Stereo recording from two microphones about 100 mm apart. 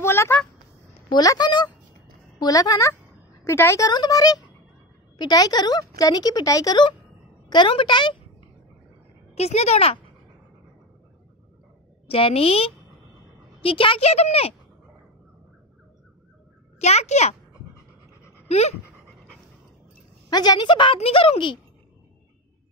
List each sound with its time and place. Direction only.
0.0 s a sound: 25° left (ahead or behind)
1.2 s a woman's voice: 40° left (ahead or behind)
3.9 s a woman's voice: 40° left (ahead or behind)
9.3 s speech: 90° left
12.1 s a woman's voice: 75° left (ahead or behind)
13.6 s a woman's voice: 65° left (ahead or behind); by 14.5 s 90° left
16.8 s speech: 90° left
18.5 s speech: 90° left
20.2 s a woman's voice: 45° left (ahead or behind)
21.0 s speech: 70° left (ahead or behind)